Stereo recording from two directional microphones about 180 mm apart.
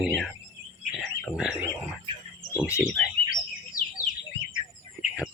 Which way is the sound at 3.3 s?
50° left (ahead or behind).